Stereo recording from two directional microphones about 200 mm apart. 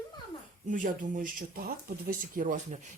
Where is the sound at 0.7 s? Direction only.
40° right (ahead or behind).